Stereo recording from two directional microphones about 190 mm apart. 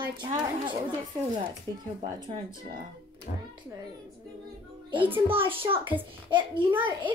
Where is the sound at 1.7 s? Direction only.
15° left (ahead or behind).